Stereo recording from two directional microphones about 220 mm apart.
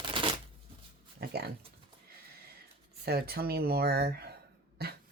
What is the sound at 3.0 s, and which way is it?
Speech, 45° right (ahead or behind).